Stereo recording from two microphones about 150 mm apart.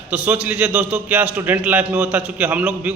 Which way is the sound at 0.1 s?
10° right (ahead or behind).